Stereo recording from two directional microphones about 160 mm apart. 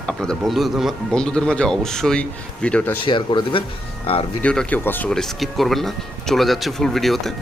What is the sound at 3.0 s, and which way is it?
Speech, 30° left (ahead or behind).